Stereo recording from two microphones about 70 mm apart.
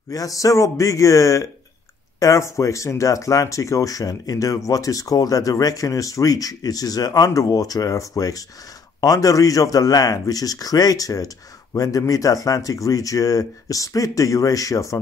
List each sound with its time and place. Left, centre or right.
0.1 s speech: left